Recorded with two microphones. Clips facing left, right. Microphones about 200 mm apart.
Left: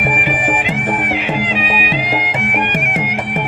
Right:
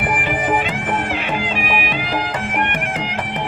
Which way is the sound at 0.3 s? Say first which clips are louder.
Left 1 dB; 20° left (ahead or behind).